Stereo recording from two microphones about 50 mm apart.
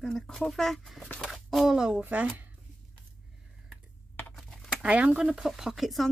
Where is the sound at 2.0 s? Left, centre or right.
Right.